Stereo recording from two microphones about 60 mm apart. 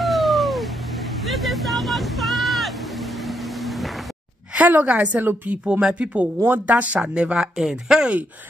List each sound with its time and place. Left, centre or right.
0.0 s a sound: centre
1.2 s vehicle: centre
4.6 s a woman's voice: right
5.7 s a woman's voice: centre
7.0 s speech: centre